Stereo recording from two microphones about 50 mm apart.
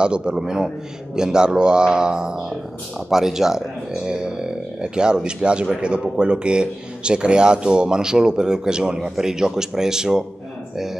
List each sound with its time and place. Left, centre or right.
0.0 s speech: centre